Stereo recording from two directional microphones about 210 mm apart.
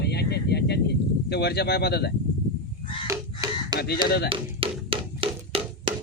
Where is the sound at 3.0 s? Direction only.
15° right (ahead or behind).